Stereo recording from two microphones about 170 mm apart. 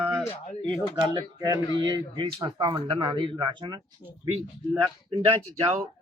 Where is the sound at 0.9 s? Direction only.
20° right (ahead or behind).